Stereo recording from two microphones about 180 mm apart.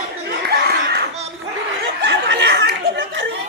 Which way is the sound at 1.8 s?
85° right.